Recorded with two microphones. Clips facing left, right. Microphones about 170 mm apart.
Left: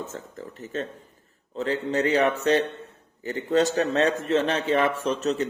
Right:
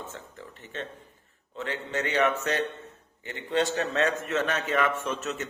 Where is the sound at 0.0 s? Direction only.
40° left (ahead or behind).